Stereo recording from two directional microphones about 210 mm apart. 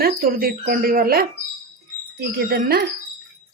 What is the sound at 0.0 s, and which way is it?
A woman's voice, 45° right (ahead or behind).